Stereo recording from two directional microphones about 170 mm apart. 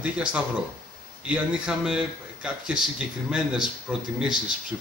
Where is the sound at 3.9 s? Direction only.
5° right (ahead or behind).